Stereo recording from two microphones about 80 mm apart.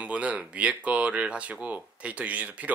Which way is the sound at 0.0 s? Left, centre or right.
Centre.